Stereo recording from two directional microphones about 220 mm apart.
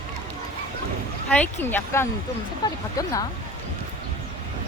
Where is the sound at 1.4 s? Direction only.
10° left (ahead or behind).